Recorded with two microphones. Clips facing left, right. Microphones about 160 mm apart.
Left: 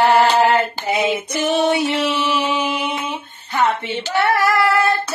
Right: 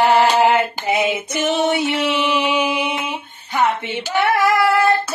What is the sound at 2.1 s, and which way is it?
Music, 15° right (ahead or behind).